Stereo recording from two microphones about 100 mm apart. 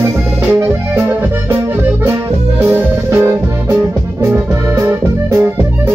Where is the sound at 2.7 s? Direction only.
25° right (ahead or behind).